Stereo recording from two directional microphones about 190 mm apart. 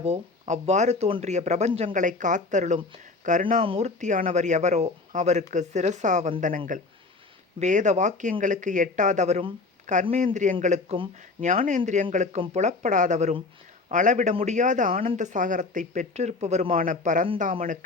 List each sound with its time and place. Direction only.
0.0 s speech: 35° right (ahead or behind)
7.6 s speech: 40° right (ahead or behind)
11.3 s speech: 45° right (ahead or behind)